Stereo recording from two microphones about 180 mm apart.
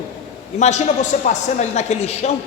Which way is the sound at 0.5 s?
40° left (ahead or behind).